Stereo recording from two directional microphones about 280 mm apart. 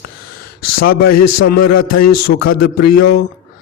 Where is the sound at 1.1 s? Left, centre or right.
Left.